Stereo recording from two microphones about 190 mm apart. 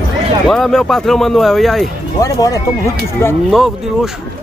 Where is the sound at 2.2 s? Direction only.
15° left (ahead or behind).